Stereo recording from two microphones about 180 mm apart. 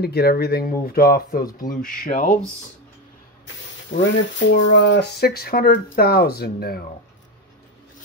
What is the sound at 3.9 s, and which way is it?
Speech, 90° left.